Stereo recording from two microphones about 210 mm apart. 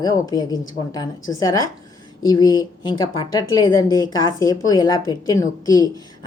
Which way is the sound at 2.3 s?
20° left (ahead or behind).